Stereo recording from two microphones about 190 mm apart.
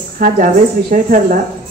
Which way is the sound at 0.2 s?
45° right (ahead or behind).